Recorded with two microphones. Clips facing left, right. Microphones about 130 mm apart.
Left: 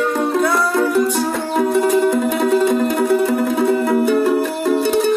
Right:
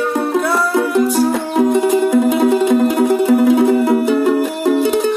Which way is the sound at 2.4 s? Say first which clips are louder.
Right 3 dB; 15° right (ahead or behind).